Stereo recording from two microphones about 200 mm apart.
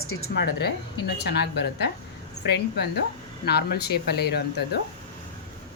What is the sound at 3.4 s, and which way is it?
A woman's voice, 55° left (ahead or behind).